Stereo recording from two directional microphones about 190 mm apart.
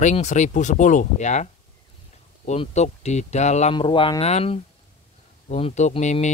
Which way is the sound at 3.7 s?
25° left (ahead or behind).